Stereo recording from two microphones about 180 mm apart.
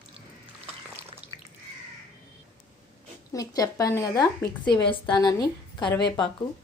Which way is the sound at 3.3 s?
20° left (ahead or behind).